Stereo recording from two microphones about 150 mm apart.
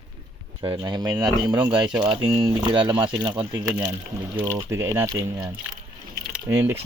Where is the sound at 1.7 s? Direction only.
5° right (ahead or behind).